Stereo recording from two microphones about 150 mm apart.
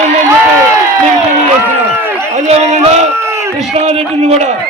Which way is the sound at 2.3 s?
50° right (ahead or behind).